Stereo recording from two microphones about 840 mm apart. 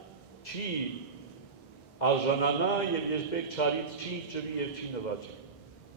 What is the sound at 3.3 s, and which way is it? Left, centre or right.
A man's voice, left.